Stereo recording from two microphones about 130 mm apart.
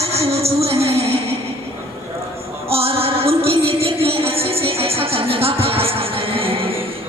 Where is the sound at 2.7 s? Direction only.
50° right (ahead or behind).